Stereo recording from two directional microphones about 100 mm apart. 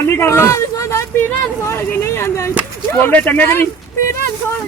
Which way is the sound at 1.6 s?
25° left (ahead or behind).